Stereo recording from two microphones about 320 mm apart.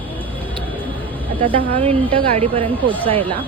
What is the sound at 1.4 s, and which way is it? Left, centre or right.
A woman's voice, centre.